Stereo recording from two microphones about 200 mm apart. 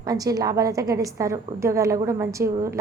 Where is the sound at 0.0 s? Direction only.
20° right (ahead or behind).